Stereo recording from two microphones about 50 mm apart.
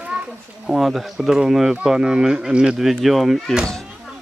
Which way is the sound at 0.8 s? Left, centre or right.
Centre.